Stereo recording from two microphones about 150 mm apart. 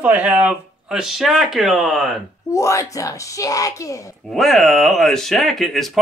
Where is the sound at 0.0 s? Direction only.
10° right (ahead or behind).